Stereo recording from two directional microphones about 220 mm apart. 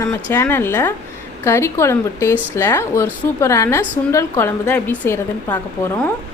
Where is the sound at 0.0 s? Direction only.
10° left (ahead or behind).